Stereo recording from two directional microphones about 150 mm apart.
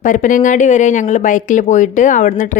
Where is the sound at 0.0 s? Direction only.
60° left (ahead or behind).